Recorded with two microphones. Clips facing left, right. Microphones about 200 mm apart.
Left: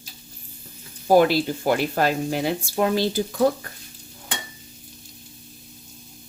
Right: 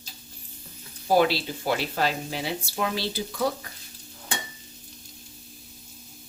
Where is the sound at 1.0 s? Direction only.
45° left (ahead or behind).